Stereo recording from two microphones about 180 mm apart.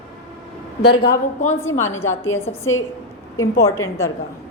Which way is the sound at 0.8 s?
65° left (ahead or behind).